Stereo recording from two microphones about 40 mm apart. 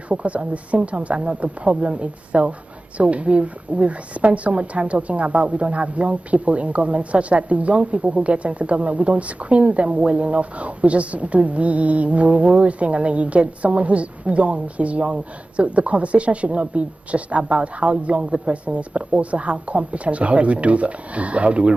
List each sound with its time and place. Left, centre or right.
0.1 s a woman's voice: right